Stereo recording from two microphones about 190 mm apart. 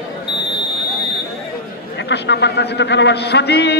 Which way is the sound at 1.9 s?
65° left (ahead or behind).